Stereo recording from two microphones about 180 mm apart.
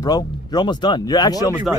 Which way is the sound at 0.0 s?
20° left (ahead or behind).